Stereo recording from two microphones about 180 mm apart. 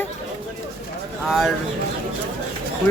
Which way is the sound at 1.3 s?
Centre (ahead or behind).